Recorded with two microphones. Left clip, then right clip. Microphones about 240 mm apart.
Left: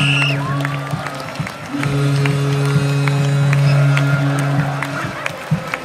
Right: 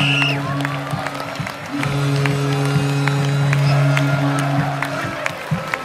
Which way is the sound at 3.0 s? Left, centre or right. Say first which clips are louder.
Left 1 dB; right.